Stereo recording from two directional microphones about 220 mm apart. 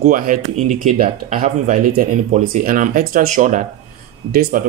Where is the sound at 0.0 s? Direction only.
35° right (ahead or behind).